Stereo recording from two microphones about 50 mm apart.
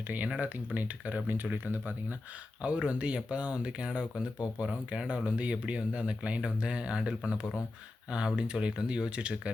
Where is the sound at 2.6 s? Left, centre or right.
Right.